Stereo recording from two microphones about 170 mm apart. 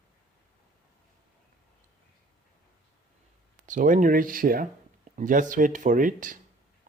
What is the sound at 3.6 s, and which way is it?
Speech, 50° right (ahead or behind).